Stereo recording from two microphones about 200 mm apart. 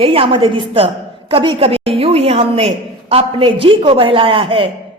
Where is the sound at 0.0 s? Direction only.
25° right (ahead or behind).